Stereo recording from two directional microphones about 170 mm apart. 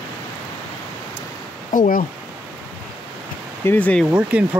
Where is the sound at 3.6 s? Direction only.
10° left (ahead or behind).